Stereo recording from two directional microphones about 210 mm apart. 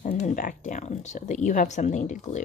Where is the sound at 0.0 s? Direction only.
35° left (ahead or behind).